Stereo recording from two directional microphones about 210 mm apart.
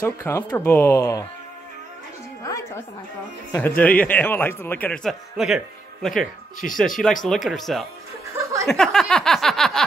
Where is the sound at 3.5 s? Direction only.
10° left (ahead or behind).